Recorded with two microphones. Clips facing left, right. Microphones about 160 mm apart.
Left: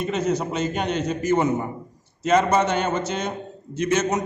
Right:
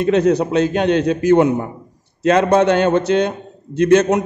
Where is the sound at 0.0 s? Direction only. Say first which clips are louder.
Right 9 dB; 70° right (ahead or behind).